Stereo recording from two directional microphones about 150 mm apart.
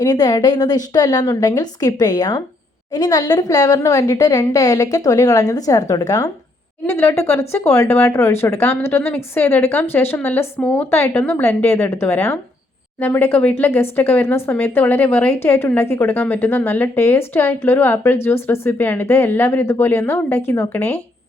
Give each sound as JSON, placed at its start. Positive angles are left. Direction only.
{"t": 0.0, "sound": "a woman's voice", "side_deg": 25}